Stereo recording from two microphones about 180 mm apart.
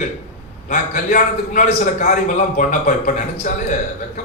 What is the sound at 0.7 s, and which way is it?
A man's voice, 45° left (ahead or behind).